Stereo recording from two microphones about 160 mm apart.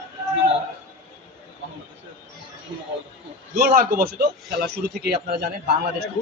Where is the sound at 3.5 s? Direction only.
60° right (ahead or behind).